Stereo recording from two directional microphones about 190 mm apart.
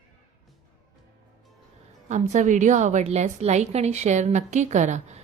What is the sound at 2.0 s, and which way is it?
A woman's voice, 40° right (ahead or behind).